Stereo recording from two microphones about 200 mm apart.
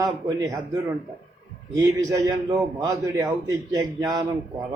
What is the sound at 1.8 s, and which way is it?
A man's voice, 15° right (ahead or behind).